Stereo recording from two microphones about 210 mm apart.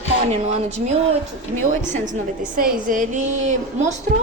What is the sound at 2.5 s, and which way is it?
A woman's voice, 40° right (ahead or behind).